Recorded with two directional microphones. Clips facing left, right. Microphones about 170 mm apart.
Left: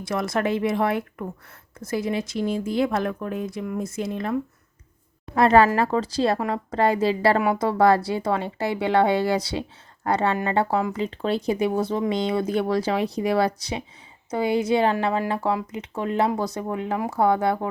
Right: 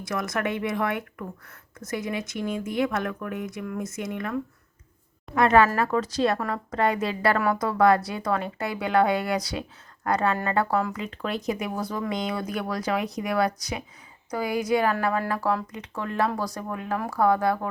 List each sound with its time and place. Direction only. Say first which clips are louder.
0.0 s a woman's voice: left 4 dB; 30° left (ahead or behind)